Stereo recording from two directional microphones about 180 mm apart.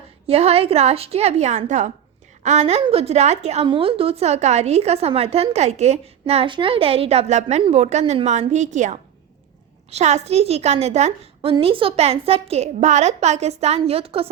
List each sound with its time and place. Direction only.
0.3 s a woman's voice: 35° right (ahead or behind)